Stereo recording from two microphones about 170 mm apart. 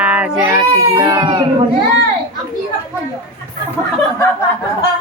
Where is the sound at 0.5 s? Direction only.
20° right (ahead or behind).